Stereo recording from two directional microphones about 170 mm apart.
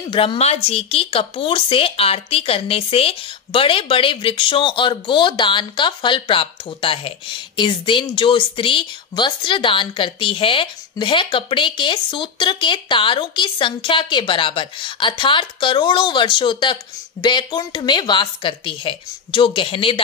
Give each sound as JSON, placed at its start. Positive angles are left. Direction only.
{"t": 0.1, "sound": "speech", "side_deg": 30}